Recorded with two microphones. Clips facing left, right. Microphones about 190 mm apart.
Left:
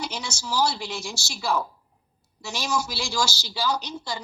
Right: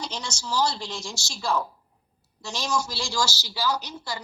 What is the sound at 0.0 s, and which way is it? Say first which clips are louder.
A woman's voice: left 1 dB; 10° left (ahead or behind).